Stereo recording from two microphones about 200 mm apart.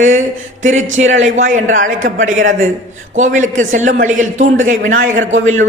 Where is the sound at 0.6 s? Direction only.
35° right (ahead or behind).